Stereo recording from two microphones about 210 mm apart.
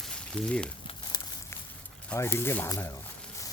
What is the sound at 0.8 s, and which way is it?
Crumpling, 25° left (ahead or behind).